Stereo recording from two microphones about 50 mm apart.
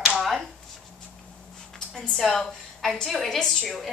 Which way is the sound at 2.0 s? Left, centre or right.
Centre.